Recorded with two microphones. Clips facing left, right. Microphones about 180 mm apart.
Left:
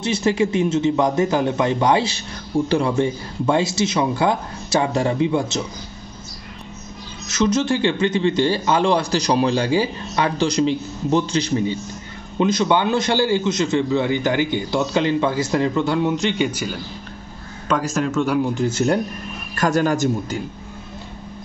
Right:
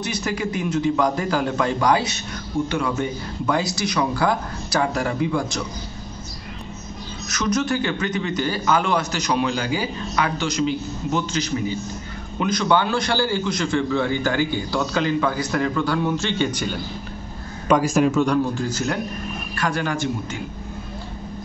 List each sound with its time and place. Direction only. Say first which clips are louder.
0.0 s a man's voice: left 6 dB; 25° left (ahead or behind)
7.2 s a man's voice: left 4 dB; 25° left (ahead or behind); by 16.8 s 5° left (ahead or behind)
17.6 s a man's voice: right 4 dB; 10° right (ahead or behind)
18.2 s speech: even; 5° left (ahead or behind)
18.5 s a man's voice: left 5 dB; 25° left (ahead or behind)
19.5 s a man's voice: left 6 dB; 40° left (ahead or behind)